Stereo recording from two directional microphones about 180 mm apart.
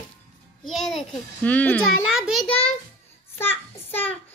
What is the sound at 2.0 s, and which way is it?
Speech, 5° right (ahead or behind).